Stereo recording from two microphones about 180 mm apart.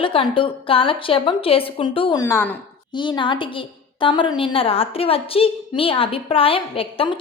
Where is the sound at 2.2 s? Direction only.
10° left (ahead or behind).